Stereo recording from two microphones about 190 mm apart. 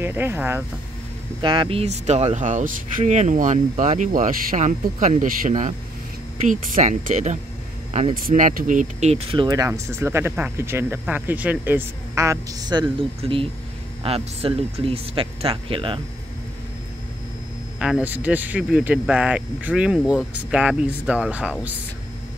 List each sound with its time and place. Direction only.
0.0 s speech: 10° right (ahead or behind)
1.4 s speech: 25° right (ahead or behind)
17.7 s speech: 5° right (ahead or behind)